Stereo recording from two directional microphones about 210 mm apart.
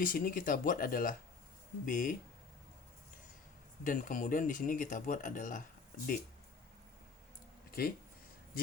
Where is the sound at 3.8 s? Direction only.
40° left (ahead or behind).